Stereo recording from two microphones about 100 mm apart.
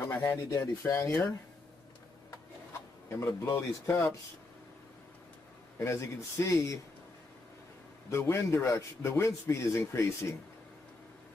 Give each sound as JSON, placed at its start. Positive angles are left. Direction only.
{"t": 0.1, "sound": "speech", "side_deg": 30}
{"t": 3.1, "sound": "speech", "side_deg": 25}
{"t": 5.8, "sound": "speech", "side_deg": 30}
{"t": 8.1, "sound": "speech", "side_deg": 25}